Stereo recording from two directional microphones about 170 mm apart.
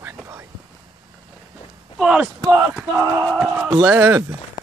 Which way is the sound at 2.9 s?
20° right (ahead or behind).